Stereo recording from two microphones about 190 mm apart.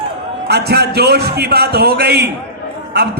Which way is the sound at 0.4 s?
60° right (ahead or behind).